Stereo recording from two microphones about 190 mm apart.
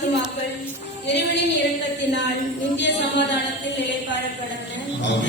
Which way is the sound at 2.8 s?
65° left (ahead or behind).